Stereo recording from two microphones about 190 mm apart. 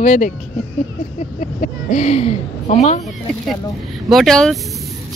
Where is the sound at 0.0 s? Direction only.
40° left (ahead or behind).